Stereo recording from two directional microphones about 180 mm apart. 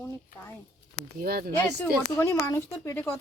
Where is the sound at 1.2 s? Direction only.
55° right (ahead or behind).